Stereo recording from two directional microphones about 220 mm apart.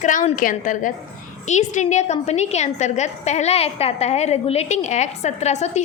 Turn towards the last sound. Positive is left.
turn(degrees=30)  # may be behind; listen again after turning